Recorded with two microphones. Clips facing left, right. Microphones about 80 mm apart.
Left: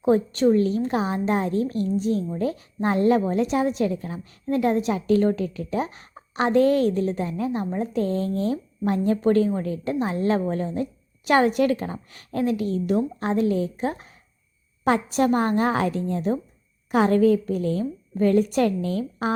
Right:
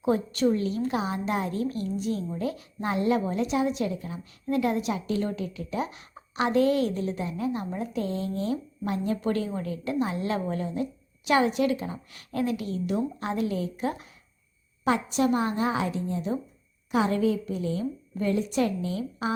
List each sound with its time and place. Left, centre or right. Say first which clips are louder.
0.0 s a woman's voice: left 5 dB; left
11.3 s a woman's voice: left 4 dB; left